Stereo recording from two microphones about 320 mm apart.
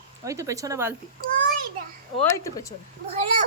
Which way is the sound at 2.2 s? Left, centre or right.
Centre.